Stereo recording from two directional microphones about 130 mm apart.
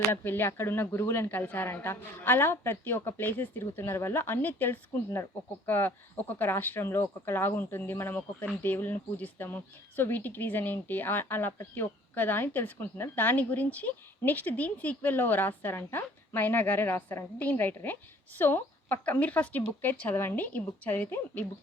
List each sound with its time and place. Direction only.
0.1 s speech: 15° left (ahead or behind)